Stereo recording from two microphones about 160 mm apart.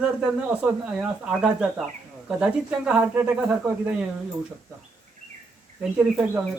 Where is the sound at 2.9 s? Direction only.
10° right (ahead or behind).